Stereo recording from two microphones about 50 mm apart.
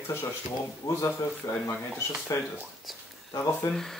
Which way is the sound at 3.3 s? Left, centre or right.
Left.